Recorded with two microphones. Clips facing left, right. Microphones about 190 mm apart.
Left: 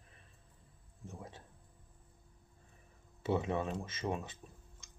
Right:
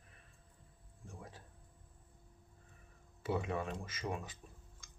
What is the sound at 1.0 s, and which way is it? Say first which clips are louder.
Speech: left 4 dB; 25° left (ahead or behind).